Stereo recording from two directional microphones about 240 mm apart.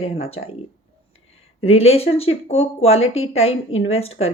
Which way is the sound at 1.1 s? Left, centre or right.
Left.